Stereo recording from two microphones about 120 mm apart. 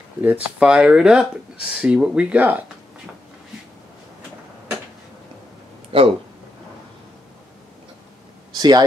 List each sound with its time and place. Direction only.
0.2 s speech: 10° right (ahead or behind)
5.9 s a sound: 50° right (ahead or behind)
8.5 s a man's voice: 35° right (ahead or behind)